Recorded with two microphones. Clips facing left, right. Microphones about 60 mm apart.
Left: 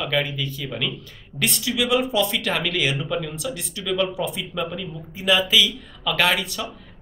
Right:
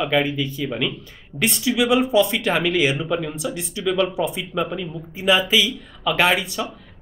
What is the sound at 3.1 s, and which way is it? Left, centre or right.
Speech, centre.